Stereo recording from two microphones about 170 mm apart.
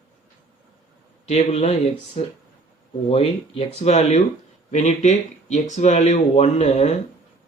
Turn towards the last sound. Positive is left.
turn(degrees=40)  # may be behind; listen again after turning